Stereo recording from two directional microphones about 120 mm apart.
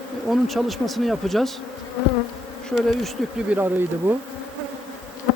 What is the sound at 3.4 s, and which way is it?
Speech, 15° right (ahead or behind).